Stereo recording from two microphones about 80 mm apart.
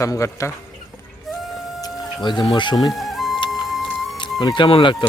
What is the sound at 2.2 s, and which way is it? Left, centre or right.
Speech, left.